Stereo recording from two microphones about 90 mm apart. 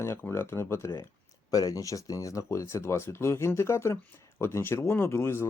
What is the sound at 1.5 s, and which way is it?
Speech, 45° left (ahead or behind).